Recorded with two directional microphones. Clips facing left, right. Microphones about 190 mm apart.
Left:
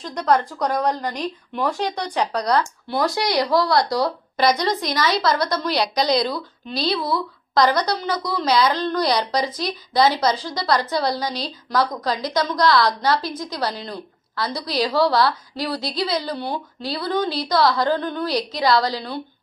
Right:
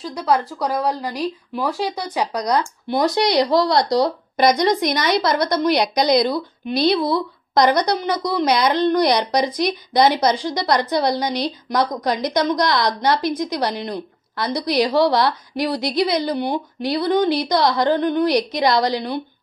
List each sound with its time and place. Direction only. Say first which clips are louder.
0.0 s a woman's voice: even; 5° right (ahead or behind)